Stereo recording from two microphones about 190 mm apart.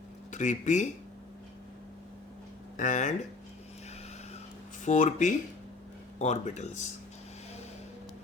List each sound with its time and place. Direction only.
0.3 s speech: 40° left (ahead or behind)
2.7 s speech: 40° left (ahead or behind)
4.9 s speech: 40° left (ahead or behind)